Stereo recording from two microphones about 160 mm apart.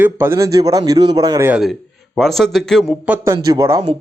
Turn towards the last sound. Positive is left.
turn(degrees=-25)  # may be behind; listen again after turning